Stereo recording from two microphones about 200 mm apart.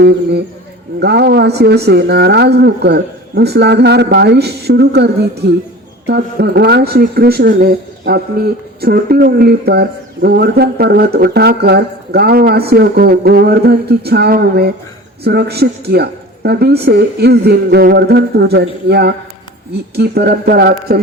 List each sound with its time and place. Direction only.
0.0 s speech: 60° right (ahead or behind)